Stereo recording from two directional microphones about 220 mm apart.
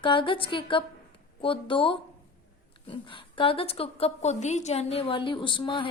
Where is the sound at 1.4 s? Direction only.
25° left (ahead or behind).